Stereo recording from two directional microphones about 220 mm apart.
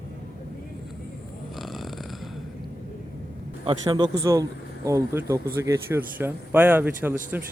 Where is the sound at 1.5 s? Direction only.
Centre (ahead or behind).